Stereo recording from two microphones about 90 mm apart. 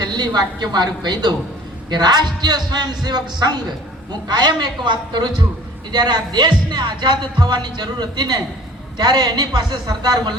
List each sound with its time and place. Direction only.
0.0 s a man's voice: 50° right (ahead or behind)